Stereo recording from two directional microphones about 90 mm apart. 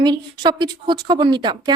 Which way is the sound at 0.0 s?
55° right (ahead or behind).